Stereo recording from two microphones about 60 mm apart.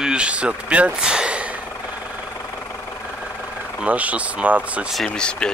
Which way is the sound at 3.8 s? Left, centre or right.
Right.